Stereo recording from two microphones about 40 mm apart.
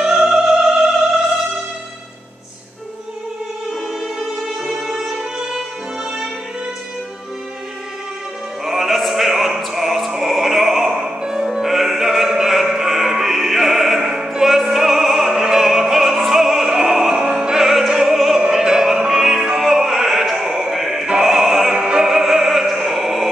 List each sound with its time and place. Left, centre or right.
0.0 s music: centre
4.2 s music: centre
8.6 s opera: centre
11.5 s music: centre
16.3 s opera: centre
18.5 s music: centre
20.8 s opera: centre
21.7 s opera: right
22.0 s opera: centre